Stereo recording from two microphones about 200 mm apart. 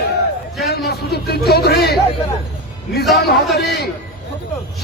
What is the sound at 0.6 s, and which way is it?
Speech, 50° left (ahead or behind).